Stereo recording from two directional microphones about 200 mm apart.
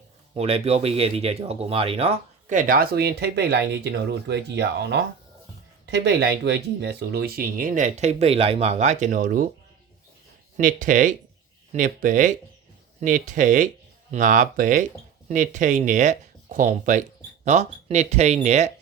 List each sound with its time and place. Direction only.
0.3 s speech: 30° right (ahead or behind)
10.6 s speech: 40° right (ahead or behind)